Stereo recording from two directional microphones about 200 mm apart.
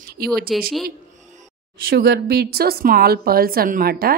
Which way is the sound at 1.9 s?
50° right (ahead or behind).